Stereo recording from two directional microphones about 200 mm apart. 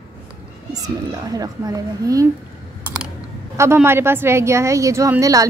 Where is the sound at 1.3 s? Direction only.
20° right (ahead or behind).